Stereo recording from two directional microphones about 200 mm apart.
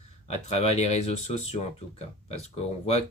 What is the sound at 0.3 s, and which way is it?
Speech, 35° left (ahead or behind).